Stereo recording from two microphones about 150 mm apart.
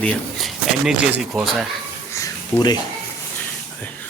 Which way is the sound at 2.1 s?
25° left (ahead or behind).